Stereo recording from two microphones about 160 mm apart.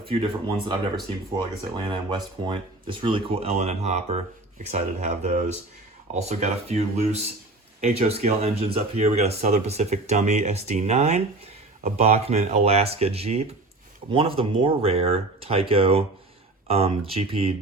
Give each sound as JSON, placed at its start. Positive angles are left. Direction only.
{"t": 0.0, "sound": "speech", "side_deg": -35}